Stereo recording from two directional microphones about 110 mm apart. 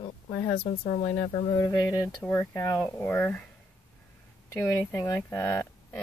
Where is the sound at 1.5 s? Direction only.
30° left (ahead or behind).